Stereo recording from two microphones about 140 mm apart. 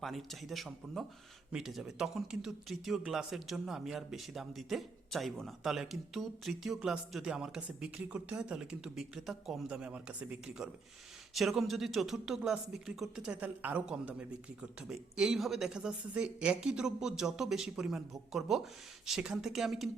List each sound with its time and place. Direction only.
0.0 s speech: centre (ahead or behind)